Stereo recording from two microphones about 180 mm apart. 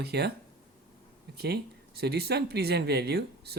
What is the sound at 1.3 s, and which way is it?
Speech, 60° right (ahead or behind).